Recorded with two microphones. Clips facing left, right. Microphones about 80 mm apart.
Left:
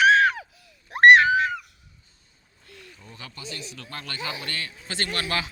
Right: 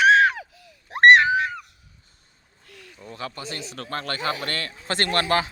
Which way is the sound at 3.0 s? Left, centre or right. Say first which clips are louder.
Right 10 dB; right.